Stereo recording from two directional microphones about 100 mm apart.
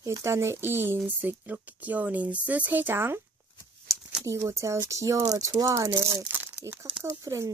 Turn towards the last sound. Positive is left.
turn(degrees=-35)  # may be behind; listen again after turning